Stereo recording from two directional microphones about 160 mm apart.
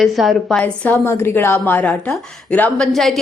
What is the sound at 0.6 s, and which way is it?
A woman's voice, 10° left (ahead or behind).